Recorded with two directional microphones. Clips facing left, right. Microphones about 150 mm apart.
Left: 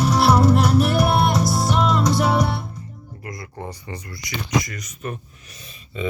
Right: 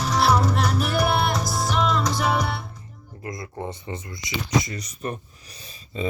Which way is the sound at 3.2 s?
25° right (ahead or behind).